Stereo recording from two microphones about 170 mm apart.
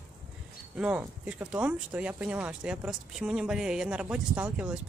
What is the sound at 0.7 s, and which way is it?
Speech, 5° right (ahead or behind).